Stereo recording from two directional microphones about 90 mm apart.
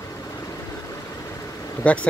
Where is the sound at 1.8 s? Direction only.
15° left (ahead or behind).